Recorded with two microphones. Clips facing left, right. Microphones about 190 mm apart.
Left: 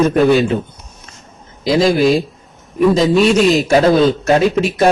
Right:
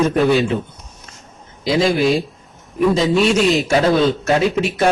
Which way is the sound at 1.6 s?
40° left (ahead or behind).